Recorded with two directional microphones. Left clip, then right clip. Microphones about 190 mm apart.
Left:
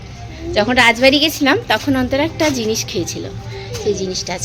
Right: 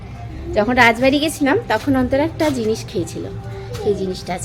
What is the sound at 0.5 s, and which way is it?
A woman's voice, 10° right (ahead or behind).